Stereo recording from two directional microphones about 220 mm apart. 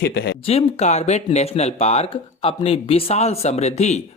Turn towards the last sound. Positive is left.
turn(degrees=30)  # may be behind; listen again after turning